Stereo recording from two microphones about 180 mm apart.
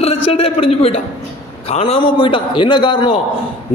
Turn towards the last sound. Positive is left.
turn(degrees=30)  # may be behind; listen again after turning